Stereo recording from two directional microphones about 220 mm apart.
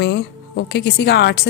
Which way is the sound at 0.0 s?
50° left (ahead or behind).